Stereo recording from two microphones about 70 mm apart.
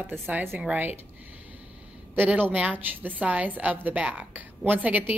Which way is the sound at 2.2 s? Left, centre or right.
Right.